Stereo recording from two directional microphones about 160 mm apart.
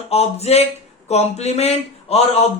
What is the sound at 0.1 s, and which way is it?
Speech, 40° left (ahead or behind).